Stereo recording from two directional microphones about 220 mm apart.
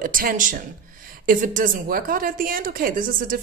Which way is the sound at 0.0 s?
40° right (ahead or behind).